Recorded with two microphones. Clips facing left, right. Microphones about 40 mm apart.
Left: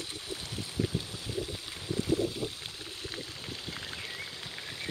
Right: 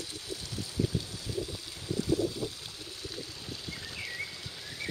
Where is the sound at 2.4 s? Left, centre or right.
Left.